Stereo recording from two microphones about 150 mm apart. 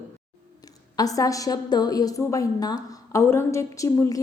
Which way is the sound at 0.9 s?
25° left (ahead or behind).